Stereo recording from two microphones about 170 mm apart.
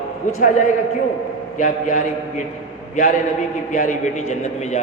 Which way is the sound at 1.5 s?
50° left (ahead or behind).